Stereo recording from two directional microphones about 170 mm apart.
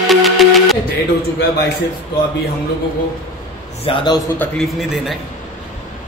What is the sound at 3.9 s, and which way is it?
Speech, 25° left (ahead or behind).